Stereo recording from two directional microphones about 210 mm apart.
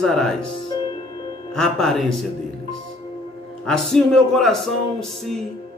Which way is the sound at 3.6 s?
Centre (ahead or behind).